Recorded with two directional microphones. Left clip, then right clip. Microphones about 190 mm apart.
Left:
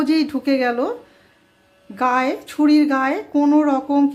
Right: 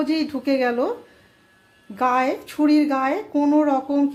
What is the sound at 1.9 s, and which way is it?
Speech, 10° left (ahead or behind).